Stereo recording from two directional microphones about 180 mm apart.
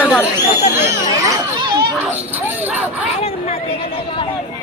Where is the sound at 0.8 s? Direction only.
20° right (ahead or behind).